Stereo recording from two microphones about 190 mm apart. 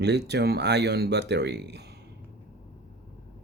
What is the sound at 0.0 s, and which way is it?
Speech, 60° right (ahead or behind).